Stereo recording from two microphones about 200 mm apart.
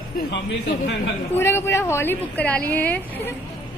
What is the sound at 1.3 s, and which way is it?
A woman's voice, 10° left (ahead or behind).